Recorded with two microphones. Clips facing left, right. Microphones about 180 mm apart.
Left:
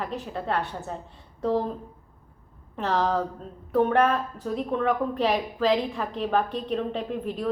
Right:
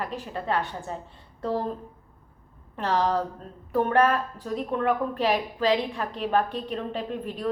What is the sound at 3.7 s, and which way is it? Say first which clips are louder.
A woman's voice: left 1 dB; 5° right (ahead or behind).